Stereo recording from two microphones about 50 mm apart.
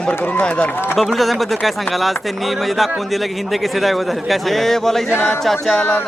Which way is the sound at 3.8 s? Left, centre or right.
Centre.